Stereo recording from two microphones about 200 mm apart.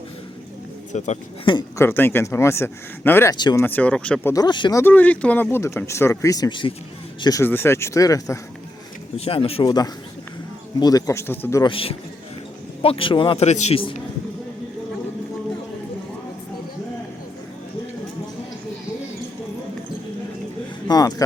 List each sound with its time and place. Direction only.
0.9 s a man's voice: 35° left (ahead or behind)
1.8 s speech: 10° left (ahead or behind)
3.3 s a man's voice: 20° left (ahead or behind)
3.6 s speech: 10° left (ahead or behind)
4.8 s speech: 10° left (ahead or behind)
9.1 s a man's voice: 30° left (ahead or behind); by 11.6 s 10° left (ahead or behind)
11.6 s a man's voice: 25° left (ahead or behind)
20.8 s speech: 20° left (ahead or behind)